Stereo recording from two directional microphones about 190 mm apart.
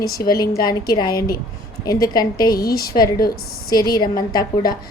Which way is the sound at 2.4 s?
55° left (ahead or behind).